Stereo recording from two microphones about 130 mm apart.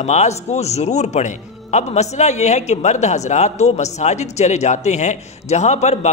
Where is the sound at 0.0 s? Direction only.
60° left (ahead or behind).